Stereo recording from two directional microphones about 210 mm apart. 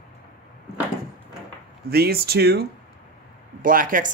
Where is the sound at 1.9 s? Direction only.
50° right (ahead or behind).